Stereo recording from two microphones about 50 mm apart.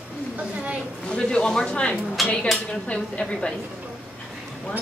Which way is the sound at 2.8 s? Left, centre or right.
Left.